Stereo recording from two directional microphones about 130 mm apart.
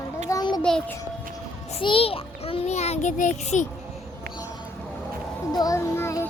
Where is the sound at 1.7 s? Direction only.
45° left (ahead or behind); by 3.6 s 65° left (ahead or behind).